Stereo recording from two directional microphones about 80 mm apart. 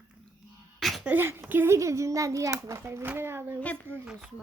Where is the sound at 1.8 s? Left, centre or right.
Right.